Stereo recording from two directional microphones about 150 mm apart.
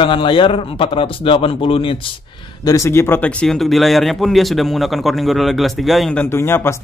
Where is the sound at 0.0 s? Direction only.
35° left (ahead or behind).